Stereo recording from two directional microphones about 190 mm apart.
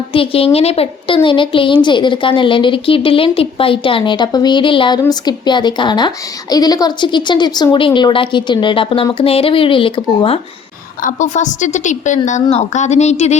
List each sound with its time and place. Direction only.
0.1 s speech: 30° left (ahead or behind)
11.0 s a woman's voice: 40° left (ahead or behind)